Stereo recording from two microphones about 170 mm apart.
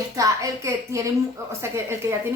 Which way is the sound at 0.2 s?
20° right (ahead or behind).